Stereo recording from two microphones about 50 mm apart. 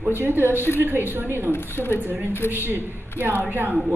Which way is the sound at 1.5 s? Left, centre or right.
Left.